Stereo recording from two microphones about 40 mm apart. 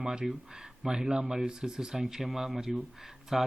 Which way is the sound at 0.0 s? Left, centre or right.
Right.